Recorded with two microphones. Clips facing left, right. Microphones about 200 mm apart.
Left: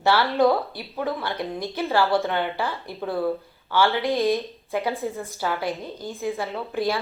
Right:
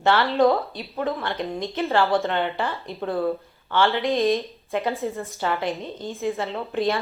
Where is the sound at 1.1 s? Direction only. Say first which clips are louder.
Even; centre (ahead or behind).